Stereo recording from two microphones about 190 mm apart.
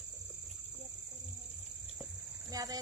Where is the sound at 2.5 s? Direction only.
20° right (ahead or behind).